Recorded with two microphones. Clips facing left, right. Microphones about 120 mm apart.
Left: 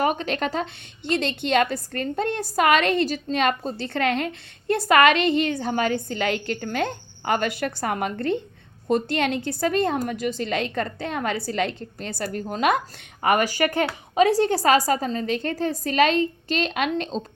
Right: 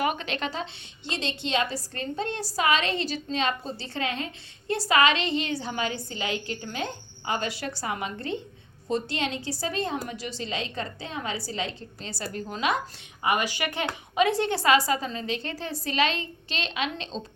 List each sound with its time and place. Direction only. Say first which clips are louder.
0.0 s a woman's voice: left 5 dB; 40° left (ahead or behind)